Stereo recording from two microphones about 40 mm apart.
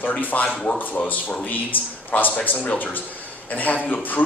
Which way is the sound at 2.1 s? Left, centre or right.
Left.